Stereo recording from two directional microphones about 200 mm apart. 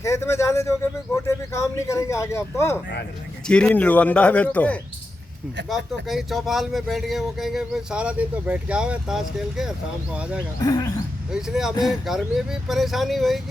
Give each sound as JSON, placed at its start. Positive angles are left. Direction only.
{"t": 0.0, "sound": "speech", "side_deg": 15}
{"t": 10.6, "sound": "speech", "side_deg": 15}
{"t": 11.3, "sound": "speech", "side_deg": -5}